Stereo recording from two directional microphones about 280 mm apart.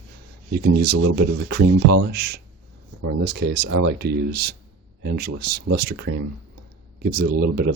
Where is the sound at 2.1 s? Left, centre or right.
Right.